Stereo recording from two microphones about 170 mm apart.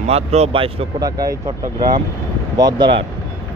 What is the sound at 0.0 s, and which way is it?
Speech, 40° right (ahead or behind).